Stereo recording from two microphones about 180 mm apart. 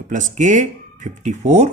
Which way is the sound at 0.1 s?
45° right (ahead or behind).